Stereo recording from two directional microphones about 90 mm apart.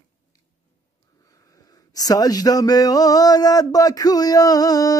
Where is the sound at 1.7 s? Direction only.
45° left (ahead or behind).